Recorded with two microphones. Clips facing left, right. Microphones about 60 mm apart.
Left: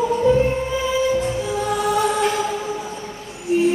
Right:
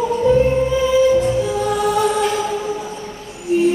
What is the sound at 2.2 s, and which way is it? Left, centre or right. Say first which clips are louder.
Music: right 1 dB; left.